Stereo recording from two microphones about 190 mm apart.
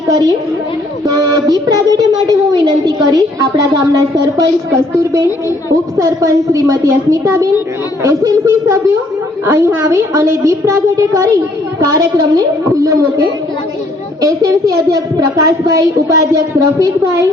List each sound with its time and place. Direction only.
0.1 s a woman's voice: 20° right (ahead or behind)
1.0 s child singing: 20° right (ahead or behind)
6.0 s speech: 15° right (ahead or behind)
11.8 s child singing: 20° right (ahead or behind)
14.2 s speech: 20° right (ahead or behind)